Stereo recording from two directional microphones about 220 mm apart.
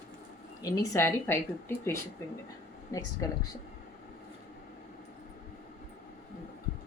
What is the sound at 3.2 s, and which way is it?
Speech, 15° left (ahead or behind).